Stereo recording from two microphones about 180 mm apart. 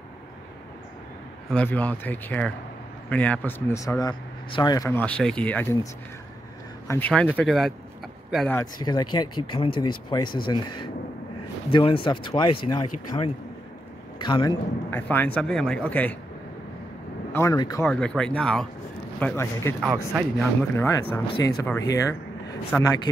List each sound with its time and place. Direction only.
1.5 s speech: 10° left (ahead or behind)
6.9 s speech: 10° left (ahead or behind)
8.7 s speech: 25° left (ahead or behind)
11.7 s a man's voice: 30° left (ahead or behind)
14.9 s speech: 10° left (ahead or behind)
17.3 s speech: 15° left (ahead or behind)
17.8 s speech: 5° left (ahead or behind)
19.9 s speech: 5° right (ahead or behind)
20.7 s speech: 15° left (ahead or behind)